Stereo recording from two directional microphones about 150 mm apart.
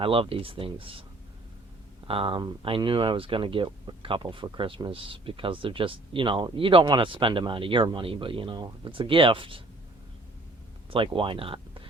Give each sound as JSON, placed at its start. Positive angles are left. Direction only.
{"t": 0.0, "sound": "speech", "side_deg": -35}
{"t": 2.0, "sound": "speech", "side_deg": -35}
{"t": 10.9, "sound": "speech", "side_deg": -35}